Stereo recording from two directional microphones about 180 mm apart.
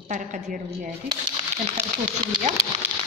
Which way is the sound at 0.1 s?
45° right (ahead or behind).